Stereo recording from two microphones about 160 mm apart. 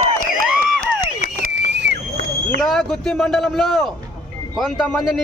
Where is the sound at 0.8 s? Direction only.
65° right (ahead or behind); by 2.2 s 90° right.